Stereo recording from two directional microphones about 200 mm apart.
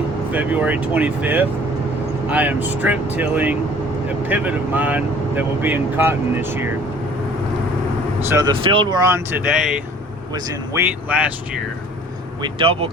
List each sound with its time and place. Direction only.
0.3 s speech: 10° right (ahead or behind)
8.3 s speech: 20° right (ahead or behind)
12.4 s speech: 25° right (ahead or behind)